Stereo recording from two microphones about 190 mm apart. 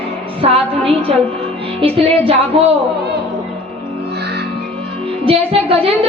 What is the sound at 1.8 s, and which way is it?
Speech, 30° right (ahead or behind).